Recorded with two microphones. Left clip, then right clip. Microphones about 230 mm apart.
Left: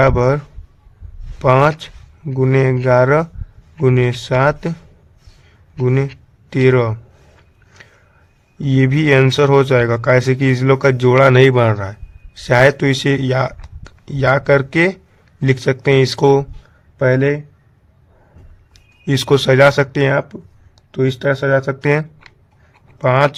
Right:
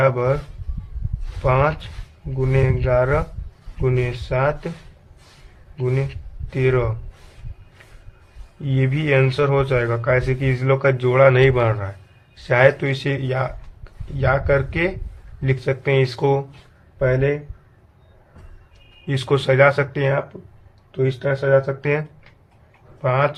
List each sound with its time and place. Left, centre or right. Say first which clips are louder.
0.0 s speech: left 5 dB; left
1.4 s speech: left 6 dB; left
5.7 s speech: left 6 dB; left
7.8 s a sound: left 6 dB; left
8.6 s speech: left 8 dB; left
19.0 s speech: left 6 dB; left